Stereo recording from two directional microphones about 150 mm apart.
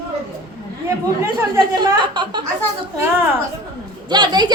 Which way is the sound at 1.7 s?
30° right (ahead or behind).